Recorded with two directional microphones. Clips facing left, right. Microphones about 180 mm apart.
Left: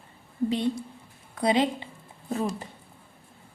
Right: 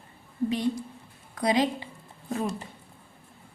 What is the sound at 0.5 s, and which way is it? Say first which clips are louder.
A woman's voice: even; 25° left (ahead or behind).